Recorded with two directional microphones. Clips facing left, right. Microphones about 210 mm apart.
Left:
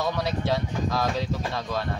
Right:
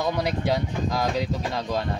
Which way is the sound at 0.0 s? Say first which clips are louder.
Right 2 dB; 15° right (ahead or behind).